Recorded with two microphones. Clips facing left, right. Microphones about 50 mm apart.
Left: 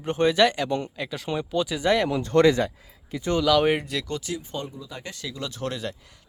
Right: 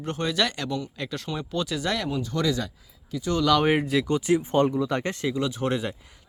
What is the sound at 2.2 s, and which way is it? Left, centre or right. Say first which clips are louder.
Speech: left 8 dB; left.